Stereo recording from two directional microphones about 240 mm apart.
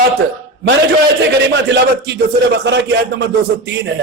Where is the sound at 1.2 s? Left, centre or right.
Right.